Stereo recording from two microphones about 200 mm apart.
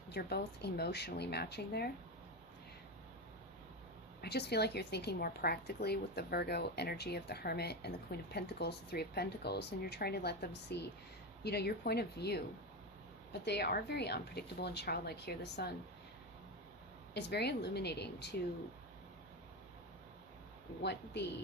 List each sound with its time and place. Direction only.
0.1 s speech: 55° left (ahead or behind)
4.2 s a woman's voice: 55° left (ahead or behind)
13.4 s speech: 55° left (ahead or behind)
17.2 s speech: 55° left (ahead or behind)
20.8 s speech: 60° left (ahead or behind)